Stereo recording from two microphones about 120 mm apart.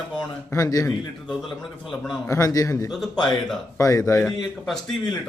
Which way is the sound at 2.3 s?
25° left (ahead or behind).